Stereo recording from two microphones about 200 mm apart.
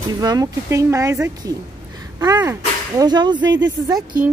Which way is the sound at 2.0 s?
20° right (ahead or behind).